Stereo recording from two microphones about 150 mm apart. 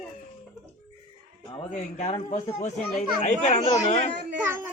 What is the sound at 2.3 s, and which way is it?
Speech, 50° left (ahead or behind).